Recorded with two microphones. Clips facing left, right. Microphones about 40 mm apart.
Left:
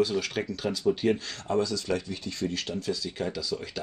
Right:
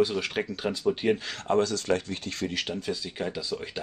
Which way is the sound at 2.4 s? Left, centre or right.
Right.